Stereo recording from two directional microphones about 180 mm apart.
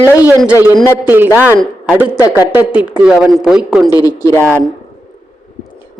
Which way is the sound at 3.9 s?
20° left (ahead or behind).